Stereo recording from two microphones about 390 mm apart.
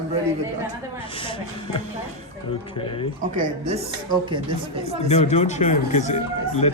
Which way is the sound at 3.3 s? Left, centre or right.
Centre.